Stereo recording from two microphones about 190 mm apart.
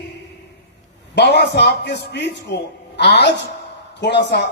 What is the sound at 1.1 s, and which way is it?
Speech, 65° left (ahead or behind).